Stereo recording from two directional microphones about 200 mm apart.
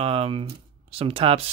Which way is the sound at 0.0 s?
30° right (ahead or behind).